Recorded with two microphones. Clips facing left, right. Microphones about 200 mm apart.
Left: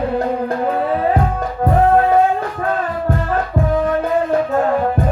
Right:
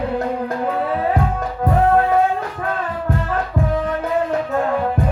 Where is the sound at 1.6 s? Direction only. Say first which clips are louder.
Left 2 dB; 35° left (ahead or behind).